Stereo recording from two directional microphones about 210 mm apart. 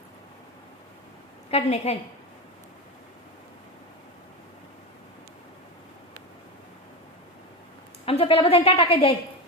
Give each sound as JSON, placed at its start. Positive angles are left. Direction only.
{"t": 1.5, "sound": "a woman's voice", "side_deg": 30}
{"t": 8.0, "sound": "a woman's voice", "side_deg": 25}